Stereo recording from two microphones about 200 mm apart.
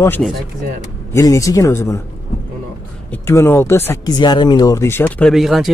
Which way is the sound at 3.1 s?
10° left (ahead or behind).